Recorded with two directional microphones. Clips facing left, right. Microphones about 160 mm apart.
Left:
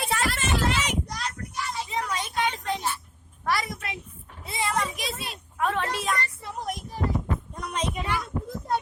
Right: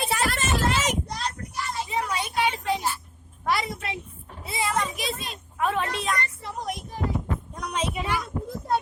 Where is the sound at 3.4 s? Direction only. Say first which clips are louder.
Right 1 dB; 25° right (ahead or behind).